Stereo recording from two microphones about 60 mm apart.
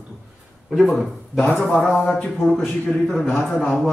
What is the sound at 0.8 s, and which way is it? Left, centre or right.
Speech, centre.